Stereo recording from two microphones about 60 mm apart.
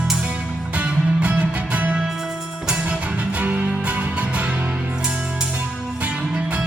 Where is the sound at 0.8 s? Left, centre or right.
Right.